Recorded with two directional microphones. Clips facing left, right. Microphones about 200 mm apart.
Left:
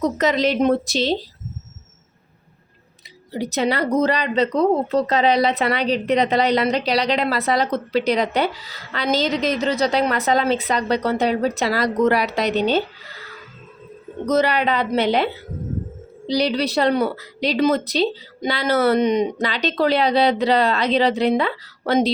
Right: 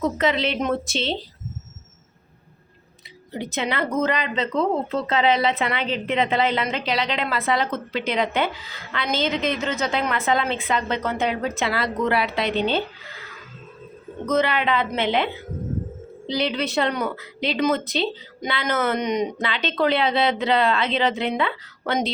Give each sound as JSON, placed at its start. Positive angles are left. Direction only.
{"t": 0.0, "sound": "a woman's voice", "side_deg": 40}
{"t": 3.3, "sound": "a woman's voice", "side_deg": 40}
{"t": 14.3, "sound": "a woman's voice", "side_deg": 40}